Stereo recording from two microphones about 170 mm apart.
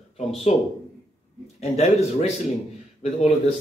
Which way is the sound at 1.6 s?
40° left (ahead or behind).